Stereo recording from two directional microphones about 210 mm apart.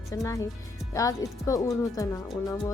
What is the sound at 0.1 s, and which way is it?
Speech, 15° left (ahead or behind).